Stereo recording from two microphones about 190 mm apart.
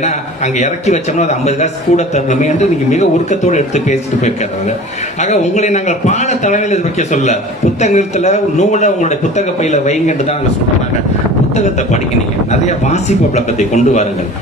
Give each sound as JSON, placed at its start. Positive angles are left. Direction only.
{"t": 0.0, "sound": "a man's voice", "side_deg": 35}
{"t": 11.5, "sound": "a man's voice", "side_deg": 35}